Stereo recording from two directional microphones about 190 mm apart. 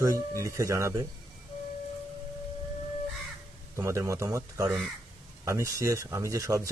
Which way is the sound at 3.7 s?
15° right (ahead or behind).